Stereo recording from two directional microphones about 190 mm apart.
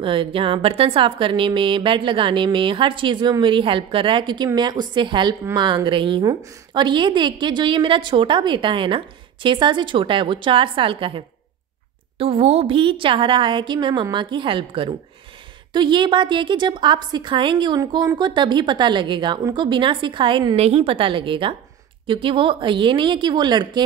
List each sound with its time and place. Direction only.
0.0 s a woman's voice: 25° right (ahead or behind)